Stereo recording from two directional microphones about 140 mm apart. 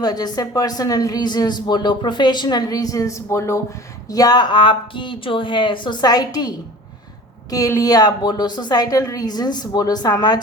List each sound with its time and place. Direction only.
0.0 s a woman's voice: 30° left (ahead or behind)
7.5 s speech: 25° left (ahead or behind)